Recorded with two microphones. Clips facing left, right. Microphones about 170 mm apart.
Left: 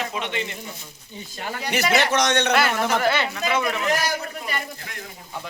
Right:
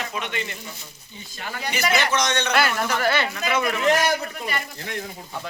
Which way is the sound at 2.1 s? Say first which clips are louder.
Left 3 dB; 65° left (ahead or behind).